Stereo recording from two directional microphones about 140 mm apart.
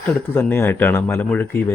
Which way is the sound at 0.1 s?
15° left (ahead or behind).